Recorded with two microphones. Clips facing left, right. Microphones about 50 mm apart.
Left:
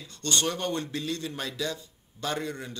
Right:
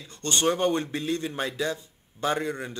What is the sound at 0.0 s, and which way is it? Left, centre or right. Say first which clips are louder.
A man's voice: right 3 dB; right.